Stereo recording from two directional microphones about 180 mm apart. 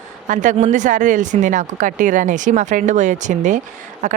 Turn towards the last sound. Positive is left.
turn(degrees=-40)  # may be behind; listen again after turning